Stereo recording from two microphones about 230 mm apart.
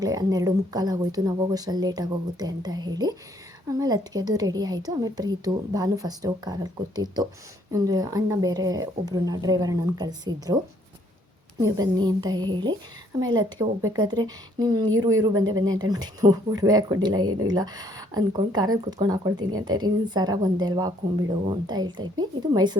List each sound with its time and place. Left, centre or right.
0.0 s a woman's voice: centre
11.6 s a woman's voice: centre